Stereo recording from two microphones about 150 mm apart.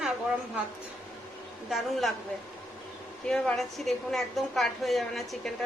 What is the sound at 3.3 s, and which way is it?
A woman's voice, centre (ahead or behind).